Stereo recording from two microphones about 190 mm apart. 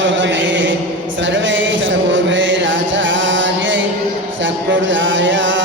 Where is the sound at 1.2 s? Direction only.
75° right (ahead or behind).